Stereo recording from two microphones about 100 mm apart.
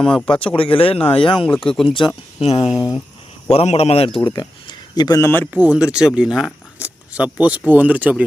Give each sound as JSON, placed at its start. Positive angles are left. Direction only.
{"t": 0.1, "sound": "speech", "side_deg": 10}
{"t": 0.4, "sound": "speech", "side_deg": 65}
{"t": 2.4, "sound": "speech", "side_deg": 90}
{"t": 2.6, "sound": "speech", "side_deg": -5}
{"t": 3.5, "sound": "speech", "side_deg": 90}
{"t": 4.2, "sound": "speech", "side_deg": 50}
{"t": 5.2, "sound": "speech", "side_deg": 20}
{"t": 5.5, "sound": "speech", "side_deg": -15}
{"t": 6.7, "sound": "a sound", "side_deg": -15}
{"t": 7.7, "sound": "speech", "side_deg": -15}